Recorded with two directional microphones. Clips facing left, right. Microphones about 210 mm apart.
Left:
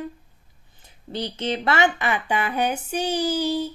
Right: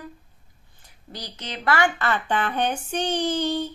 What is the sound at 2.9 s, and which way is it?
Child singing, 10° left (ahead or behind).